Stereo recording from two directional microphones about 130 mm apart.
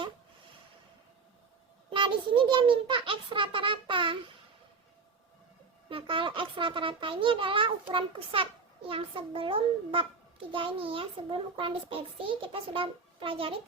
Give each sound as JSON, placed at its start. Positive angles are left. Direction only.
{"t": 1.9, "sound": "a child's voice", "side_deg": -40}
{"t": 5.9, "sound": "a child's voice", "side_deg": -40}